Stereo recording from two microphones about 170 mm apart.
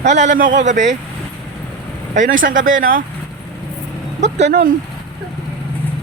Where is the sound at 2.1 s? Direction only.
50° right (ahead or behind).